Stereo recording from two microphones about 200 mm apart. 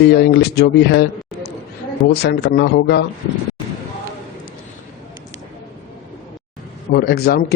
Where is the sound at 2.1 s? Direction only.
55° left (ahead or behind).